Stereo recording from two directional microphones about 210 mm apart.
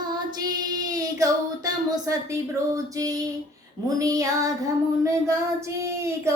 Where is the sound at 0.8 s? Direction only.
15° right (ahead or behind).